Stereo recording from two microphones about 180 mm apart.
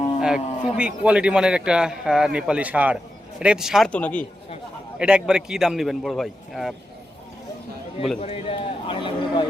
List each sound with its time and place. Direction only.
0.2 s a man's voice: 5° right (ahead or behind)
4.9 s a man's voice: 5° right (ahead or behind)
8.2 s a man's voice: 30° left (ahead or behind)